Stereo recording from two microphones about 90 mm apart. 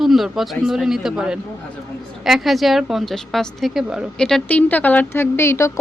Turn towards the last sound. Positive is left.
turn(degrees=30)  # may be behind; listen again after turning